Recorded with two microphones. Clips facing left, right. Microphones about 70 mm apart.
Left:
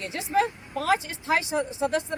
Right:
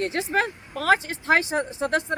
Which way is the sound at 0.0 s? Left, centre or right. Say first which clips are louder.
Right 1 dB; right.